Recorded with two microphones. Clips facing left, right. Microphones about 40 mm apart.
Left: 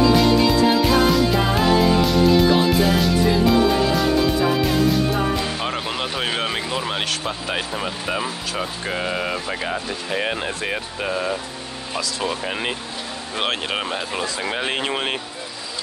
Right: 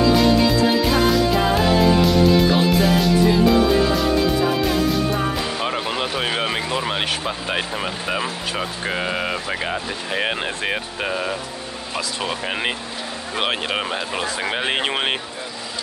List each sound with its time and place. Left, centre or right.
0.1 s music: centre; by 11.1 s right
11.1 s speech: centre
13.4 s speech: centre
14.4 s speech: right